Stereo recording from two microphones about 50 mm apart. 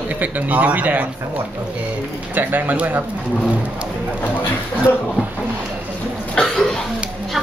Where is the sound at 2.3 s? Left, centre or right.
Right.